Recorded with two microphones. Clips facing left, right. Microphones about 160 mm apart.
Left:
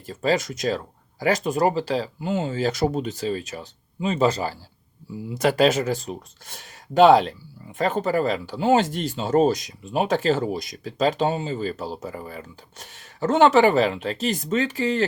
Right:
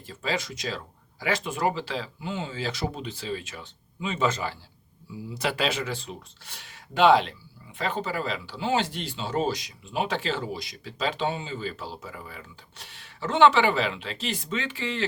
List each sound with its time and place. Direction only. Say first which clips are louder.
0.0 s speech: left 8 dB; 40° left (ahead or behind)